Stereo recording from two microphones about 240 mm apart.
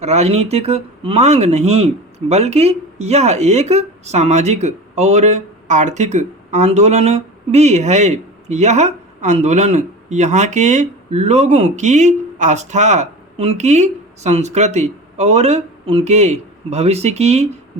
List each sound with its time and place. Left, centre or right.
0.0 s speech: right